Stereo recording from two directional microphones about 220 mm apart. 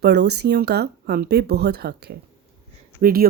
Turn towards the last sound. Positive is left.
turn(degrees=-40)  # may be behind; listen again after turning